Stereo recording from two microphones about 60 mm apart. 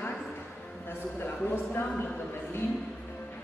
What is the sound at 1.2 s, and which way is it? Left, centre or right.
Speech, left.